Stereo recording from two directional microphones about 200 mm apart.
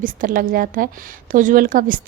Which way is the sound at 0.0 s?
45° right (ahead or behind).